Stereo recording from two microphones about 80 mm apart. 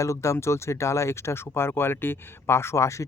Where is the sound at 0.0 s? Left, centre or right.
Left.